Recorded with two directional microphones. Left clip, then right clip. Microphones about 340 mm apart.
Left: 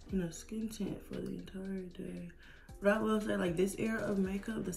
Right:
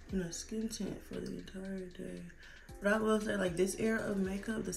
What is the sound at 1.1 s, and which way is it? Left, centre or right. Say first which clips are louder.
Speech: even; centre.